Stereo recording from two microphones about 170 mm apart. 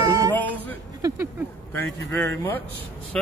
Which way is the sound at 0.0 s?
20° right (ahead or behind).